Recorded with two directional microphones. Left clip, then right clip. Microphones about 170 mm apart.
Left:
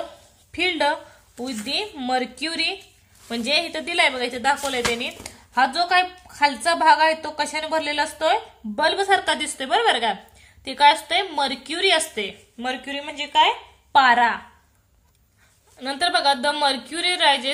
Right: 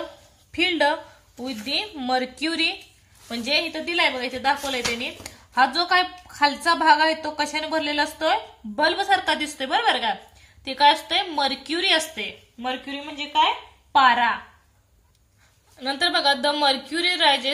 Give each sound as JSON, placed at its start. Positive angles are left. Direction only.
{"t": 0.5, "sound": "a woman's voice", "side_deg": 10}
{"t": 3.3, "sound": "a woman's voice", "side_deg": 20}
{"t": 12.5, "sound": "a woman's voice", "side_deg": 35}
{"t": 15.8, "sound": "a man's voice", "side_deg": 15}